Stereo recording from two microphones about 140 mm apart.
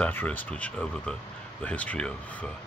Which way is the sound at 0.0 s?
15° left (ahead or behind).